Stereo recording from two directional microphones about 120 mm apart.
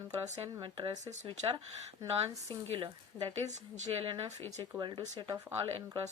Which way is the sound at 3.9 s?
45° right (ahead or behind).